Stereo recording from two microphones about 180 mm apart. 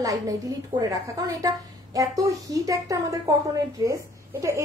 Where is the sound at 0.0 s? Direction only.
20° right (ahead or behind).